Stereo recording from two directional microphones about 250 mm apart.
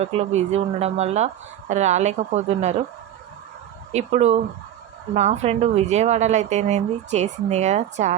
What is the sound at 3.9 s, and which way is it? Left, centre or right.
Speech, right.